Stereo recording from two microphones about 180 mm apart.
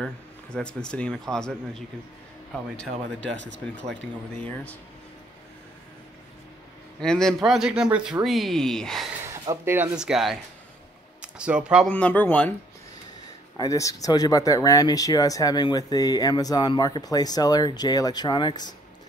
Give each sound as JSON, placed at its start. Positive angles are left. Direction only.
{"t": 0.0, "sound": "speech", "side_deg": 5}
{"t": 2.8, "sound": "speech", "side_deg": 5}
{"t": 3.3, "sound": "speech", "side_deg": -90}
{"t": 3.7, "sound": "speech", "side_deg": 5}
{"t": 7.0, "sound": "speech", "side_deg": 5}
{"t": 9.3, "sound": "speech", "side_deg": -15}
{"t": 11.9, "sound": "speech", "side_deg": 10}
{"t": 13.6, "sound": "speech", "side_deg": 20}